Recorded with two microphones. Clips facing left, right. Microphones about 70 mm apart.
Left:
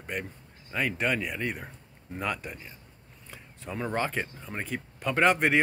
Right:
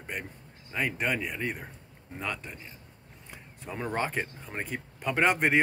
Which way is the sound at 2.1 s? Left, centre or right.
Centre.